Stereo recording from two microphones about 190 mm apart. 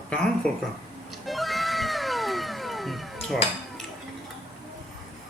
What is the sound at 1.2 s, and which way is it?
Music, centre (ahead or behind).